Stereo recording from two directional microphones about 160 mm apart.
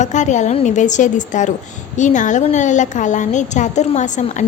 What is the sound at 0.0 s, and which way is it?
Speech, 50° left (ahead or behind).